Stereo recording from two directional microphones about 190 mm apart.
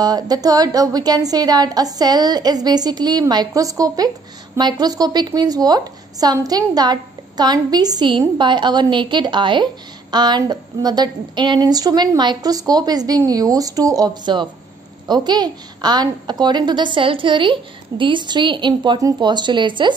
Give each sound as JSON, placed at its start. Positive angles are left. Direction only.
{"t": 0.0, "sound": "a woman's voice", "side_deg": -20}